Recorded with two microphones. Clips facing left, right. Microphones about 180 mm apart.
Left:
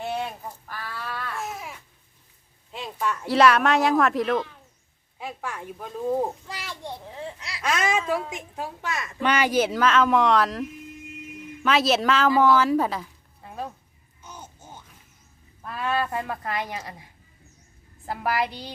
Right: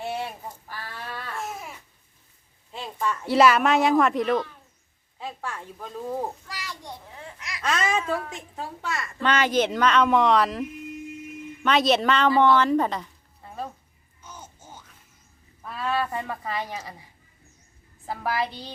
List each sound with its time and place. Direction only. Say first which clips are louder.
0.0 s fowl: left 1 dB; 5° right (ahead or behind)
0.7 s livestock: left 3 dB; 15° right (ahead or behind)
2.8 s a woman's voice: even; centre (ahead or behind)
5.2 s a child's voice: left 1 dB; 10° left (ahead or behind); by 7.6 s 30° left (ahead or behind)
7.6 s a woman's voice: left 1 dB; 10° left (ahead or behind)
15.8 s a woman's voice: left 1 dB; 5° left (ahead or behind)
18.0 s a woman's voice: left 1 dB; 10° left (ahead or behind)